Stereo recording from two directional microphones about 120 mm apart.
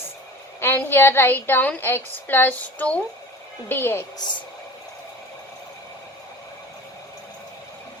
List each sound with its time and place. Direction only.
0.6 s a woman's voice: 15° left (ahead or behind)